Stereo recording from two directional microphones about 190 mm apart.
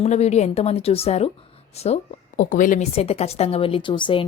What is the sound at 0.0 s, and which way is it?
Speech, 35° left (ahead or behind).